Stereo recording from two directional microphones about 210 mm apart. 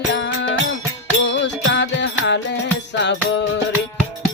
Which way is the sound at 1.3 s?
60° left (ahead or behind).